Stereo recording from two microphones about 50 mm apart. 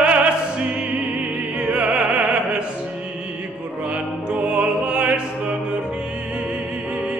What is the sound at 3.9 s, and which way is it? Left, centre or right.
Opera, right.